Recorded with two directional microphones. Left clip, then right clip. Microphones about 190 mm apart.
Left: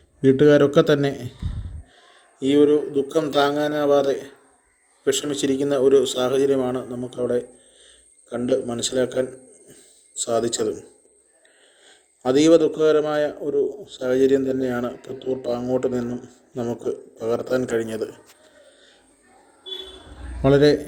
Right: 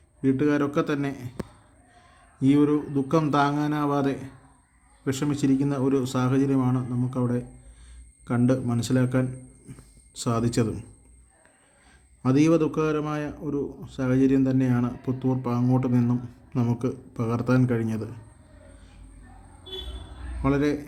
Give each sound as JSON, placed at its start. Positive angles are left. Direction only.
{"t": 0.2, "sound": "a man's voice", "side_deg": 25}
{"t": 8.4, "sound": "a man's voice", "side_deg": 15}
{"t": 12.2, "sound": "a man's voice", "side_deg": 25}
{"t": 20.4, "sound": "a man's voice", "side_deg": 25}